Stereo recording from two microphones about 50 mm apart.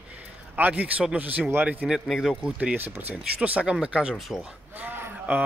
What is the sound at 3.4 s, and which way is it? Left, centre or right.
Speech, right.